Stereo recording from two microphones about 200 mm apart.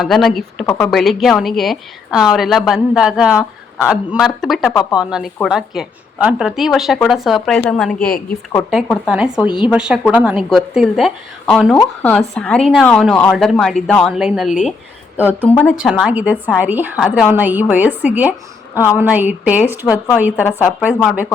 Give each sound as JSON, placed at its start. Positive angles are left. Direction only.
{"t": 0.0, "sound": "a woman's voice", "side_deg": 0}
{"t": 0.6, "sound": "speech", "side_deg": 10}
{"t": 0.9, "sound": "a woman's voice", "side_deg": 0}
{"t": 15.4, "sound": "speech", "side_deg": 10}
{"t": 15.7, "sound": "a woman's voice", "side_deg": 0}
{"t": 17.0, "sound": "a woman's voice", "side_deg": 0}
{"t": 17.2, "sound": "a woman's voice", "side_deg": -10}
{"t": 19.8, "sound": "speech", "side_deg": 15}
{"t": 20.5, "sound": "a woman's voice", "side_deg": -10}